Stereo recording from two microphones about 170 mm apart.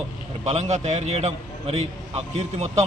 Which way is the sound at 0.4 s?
40° right (ahead or behind).